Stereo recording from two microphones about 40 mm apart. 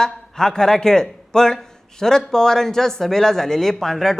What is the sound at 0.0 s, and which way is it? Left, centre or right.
A man's voice, centre.